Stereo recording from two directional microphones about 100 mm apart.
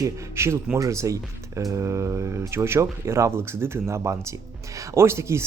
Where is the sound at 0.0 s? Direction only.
25° right (ahead or behind).